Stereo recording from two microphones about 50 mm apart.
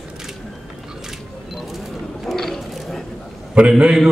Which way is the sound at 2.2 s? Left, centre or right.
Centre.